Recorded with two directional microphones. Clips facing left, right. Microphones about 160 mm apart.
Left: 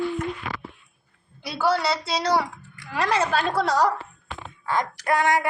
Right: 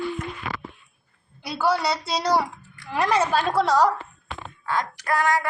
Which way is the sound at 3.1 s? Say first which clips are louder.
Right 1 dB; 10° right (ahead or behind).